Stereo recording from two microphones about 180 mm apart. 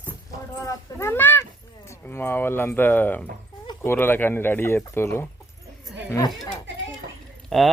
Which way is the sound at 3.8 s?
10° left (ahead or behind).